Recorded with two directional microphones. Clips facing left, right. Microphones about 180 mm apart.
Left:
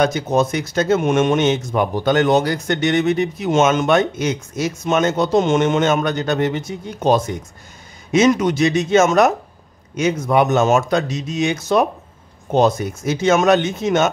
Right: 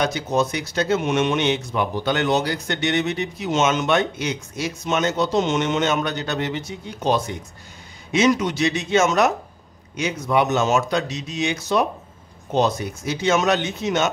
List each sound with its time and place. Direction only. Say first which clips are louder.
0.0 s speech: left 4 dB; 50° left (ahead or behind)